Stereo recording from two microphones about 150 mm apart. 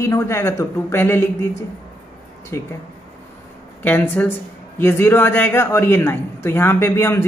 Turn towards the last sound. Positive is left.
turn(degrees=15)  # may be behind; listen again after turning